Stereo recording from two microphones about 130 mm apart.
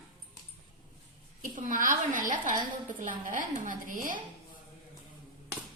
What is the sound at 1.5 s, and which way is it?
A woman's voice, 80° right.